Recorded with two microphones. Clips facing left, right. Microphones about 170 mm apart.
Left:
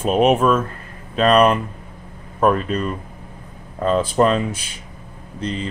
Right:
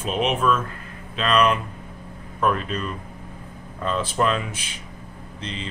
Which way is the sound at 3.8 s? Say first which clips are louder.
Left 6 dB; 40° left (ahead or behind).